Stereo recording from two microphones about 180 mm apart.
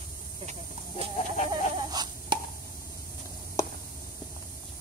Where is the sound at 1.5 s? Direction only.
25° right (ahead or behind).